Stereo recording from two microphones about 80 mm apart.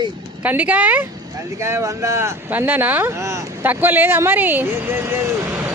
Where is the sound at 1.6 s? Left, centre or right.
Right.